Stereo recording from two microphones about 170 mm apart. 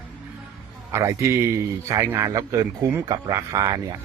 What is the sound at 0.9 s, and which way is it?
A man's voice, 15° right (ahead or behind).